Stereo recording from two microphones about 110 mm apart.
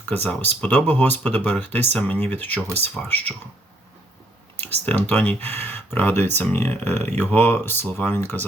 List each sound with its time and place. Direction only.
0.1 s speech: 15° left (ahead or behind)
4.9 s speech: 15° left (ahead or behind)